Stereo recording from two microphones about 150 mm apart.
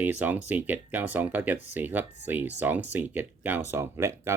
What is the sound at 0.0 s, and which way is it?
Speech, 10° right (ahead or behind).